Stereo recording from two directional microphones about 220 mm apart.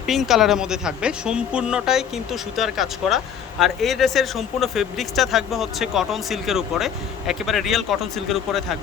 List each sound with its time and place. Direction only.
0.0 s speech: centre (ahead or behind)